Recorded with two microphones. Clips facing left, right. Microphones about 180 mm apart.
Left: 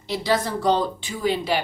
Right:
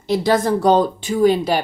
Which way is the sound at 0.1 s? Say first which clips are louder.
Right 7 dB; 45° right (ahead or behind).